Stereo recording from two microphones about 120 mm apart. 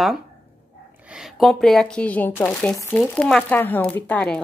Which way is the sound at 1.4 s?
5° left (ahead or behind).